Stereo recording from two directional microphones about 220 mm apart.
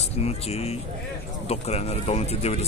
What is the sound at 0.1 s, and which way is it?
Speech, 30° left (ahead or behind).